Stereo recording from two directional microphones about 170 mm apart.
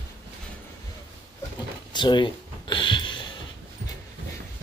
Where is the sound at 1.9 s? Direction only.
25° left (ahead or behind).